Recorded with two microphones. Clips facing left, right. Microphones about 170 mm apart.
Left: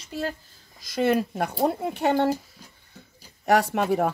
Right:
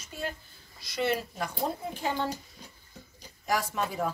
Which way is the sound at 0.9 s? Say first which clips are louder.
Left 7 dB; 50° left (ahead or behind).